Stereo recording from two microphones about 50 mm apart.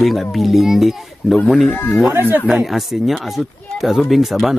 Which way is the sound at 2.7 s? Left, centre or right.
Centre.